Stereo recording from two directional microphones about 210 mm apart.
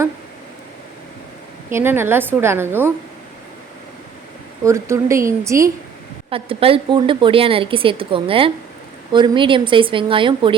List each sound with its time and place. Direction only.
1.7 s a woman's voice: 10° right (ahead or behind)
4.6 s a woman's voice: 15° right (ahead or behind)
6.3 s a woman's voice: 25° right (ahead or behind)